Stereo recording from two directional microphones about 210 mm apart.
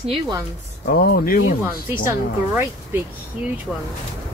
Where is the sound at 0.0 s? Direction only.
25° right (ahead or behind).